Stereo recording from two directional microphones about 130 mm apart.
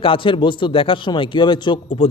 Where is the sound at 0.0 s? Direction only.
40° left (ahead or behind).